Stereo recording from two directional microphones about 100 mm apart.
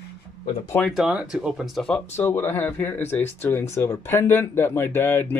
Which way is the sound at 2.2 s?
25° left (ahead or behind).